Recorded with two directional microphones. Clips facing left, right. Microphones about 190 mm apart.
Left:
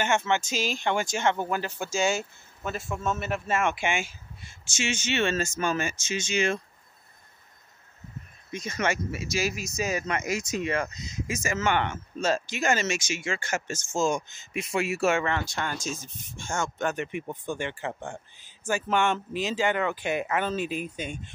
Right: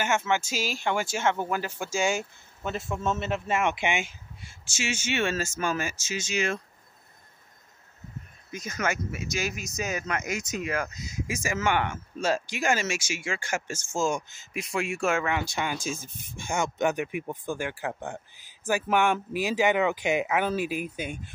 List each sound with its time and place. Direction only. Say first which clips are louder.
0.0 s speech: left 1 dB; 5° right (ahead or behind)
3.0 s speech: right 1 dB; 25° right (ahead or behind)
4.6 s speech: left 1 dB; 5° right (ahead or behind)
8.5 s speech: left 2 dB; 5° right (ahead or behind)
15.5 s speech: right 2 dB; 10° right (ahead or behind)
15.8 s speech: right 1 dB; 55° right (ahead or behind)
16.3 s speech: right 3 dB; 15° right (ahead or behind)